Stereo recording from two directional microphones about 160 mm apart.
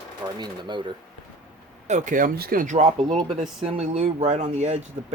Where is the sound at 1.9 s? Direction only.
50° right (ahead or behind).